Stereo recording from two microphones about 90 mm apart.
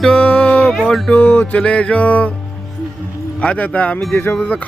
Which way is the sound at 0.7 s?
Centre (ahead or behind).